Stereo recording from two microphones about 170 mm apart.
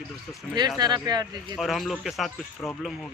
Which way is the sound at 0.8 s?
25° right (ahead or behind).